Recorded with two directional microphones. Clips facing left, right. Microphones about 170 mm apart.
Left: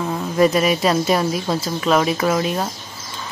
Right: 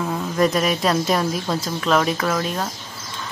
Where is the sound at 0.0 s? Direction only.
5° left (ahead or behind).